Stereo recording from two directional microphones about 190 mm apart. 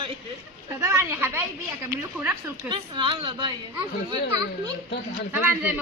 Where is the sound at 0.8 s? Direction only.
15° right (ahead or behind).